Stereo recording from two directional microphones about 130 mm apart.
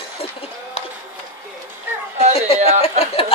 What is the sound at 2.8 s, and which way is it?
Speech, 50° left (ahead or behind).